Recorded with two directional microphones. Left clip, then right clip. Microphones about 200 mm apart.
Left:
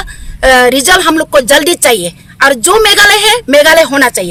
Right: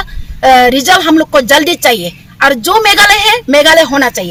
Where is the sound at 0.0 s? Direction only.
25° left (ahead or behind).